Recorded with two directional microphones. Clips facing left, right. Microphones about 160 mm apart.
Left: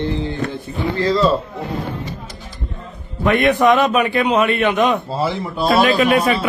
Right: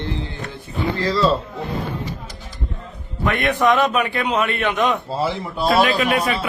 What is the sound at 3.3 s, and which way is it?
A man's voice, 15° left (ahead or behind).